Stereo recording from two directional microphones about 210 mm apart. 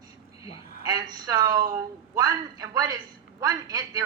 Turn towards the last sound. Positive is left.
turn(degrees=-15)  # may be behind; listen again after turning